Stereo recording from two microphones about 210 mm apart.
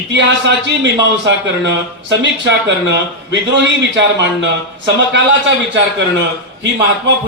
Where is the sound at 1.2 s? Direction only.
60° right (ahead or behind).